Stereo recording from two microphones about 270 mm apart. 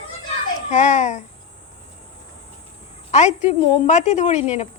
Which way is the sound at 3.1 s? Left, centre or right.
Left.